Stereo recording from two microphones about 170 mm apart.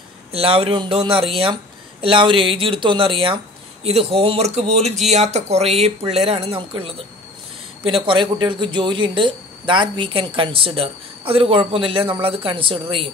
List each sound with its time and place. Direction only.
0.3 s speech: 35° right (ahead or behind)